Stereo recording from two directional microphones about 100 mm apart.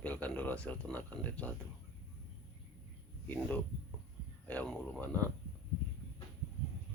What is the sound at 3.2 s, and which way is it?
Speech, 15° left (ahead or behind).